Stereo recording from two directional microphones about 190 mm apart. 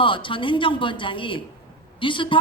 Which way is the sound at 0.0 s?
25° left (ahead or behind).